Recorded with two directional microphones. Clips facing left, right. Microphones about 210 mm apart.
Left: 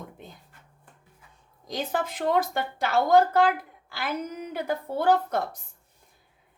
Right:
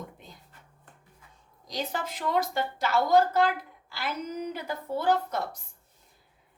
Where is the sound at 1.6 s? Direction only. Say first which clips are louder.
Left 4 dB; 55° left (ahead or behind).